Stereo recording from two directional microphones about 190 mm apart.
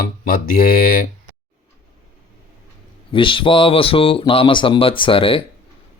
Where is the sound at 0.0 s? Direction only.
50° left (ahead or behind).